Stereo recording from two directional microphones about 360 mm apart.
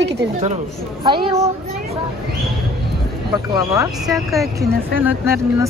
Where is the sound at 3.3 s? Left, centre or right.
Centre.